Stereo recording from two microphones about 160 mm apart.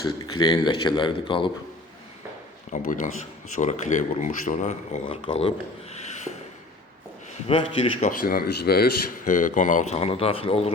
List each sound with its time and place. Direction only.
0.3 s a man's voice: 30° left (ahead or behind)
2.7 s speech: 55° left (ahead or behind)
7.4 s a man's voice: 35° left (ahead or behind)
8.2 s speech: 70° left (ahead or behind); by 10.7 s 35° left (ahead or behind)